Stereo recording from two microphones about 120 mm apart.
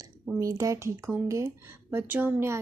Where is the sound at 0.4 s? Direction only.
25° right (ahead or behind).